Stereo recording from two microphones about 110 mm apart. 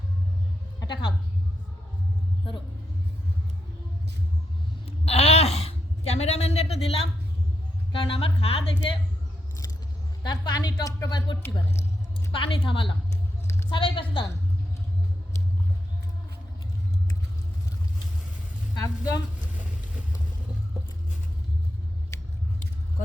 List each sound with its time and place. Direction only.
0.8 s a woman's voice: 45° left (ahead or behind)
5.0 s a sound: 70° left (ahead or behind)
10.2 s a woman's voice: 40° left (ahead or behind)
12.3 s a woman's voice: 50° left (ahead or behind)
18.7 s a woman's voice: 35° left (ahead or behind)
22.1 s a sound: 25° left (ahead or behind)